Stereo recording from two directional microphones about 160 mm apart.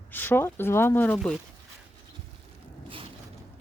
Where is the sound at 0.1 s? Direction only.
15° left (ahead or behind).